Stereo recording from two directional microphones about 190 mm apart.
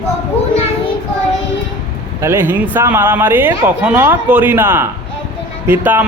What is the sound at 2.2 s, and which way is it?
A man's voice, 10° right (ahead or behind).